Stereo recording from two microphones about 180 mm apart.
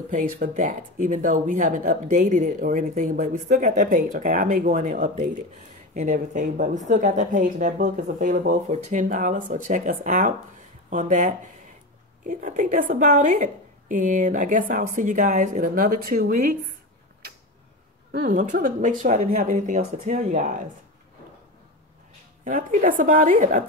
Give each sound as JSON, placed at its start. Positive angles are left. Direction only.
{"t": 0.1, "sound": "speech", "side_deg": -45}
{"t": 18.1, "sound": "speech", "side_deg": -50}
{"t": 22.4, "sound": "speech", "side_deg": -45}